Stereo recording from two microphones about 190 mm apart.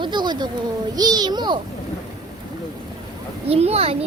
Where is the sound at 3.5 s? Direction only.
30° right (ahead or behind).